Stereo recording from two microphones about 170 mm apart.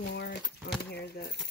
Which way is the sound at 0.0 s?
75° left (ahead or behind).